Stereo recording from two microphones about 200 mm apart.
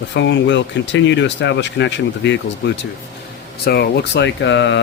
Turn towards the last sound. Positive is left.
turn(degrees=65)  # may be behind; listen again after turning